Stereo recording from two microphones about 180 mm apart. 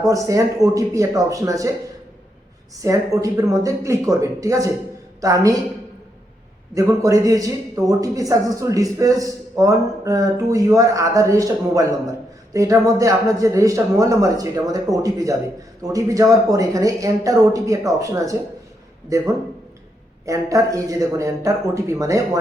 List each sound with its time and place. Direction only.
0.0 s speech: 20° right (ahead or behind)
2.8 s speech: 15° right (ahead or behind)
6.7 s speech: 20° right (ahead or behind)
20.2 s speech: 20° right (ahead or behind)